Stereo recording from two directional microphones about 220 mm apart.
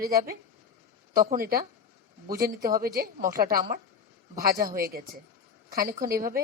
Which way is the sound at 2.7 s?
45° right (ahead or behind).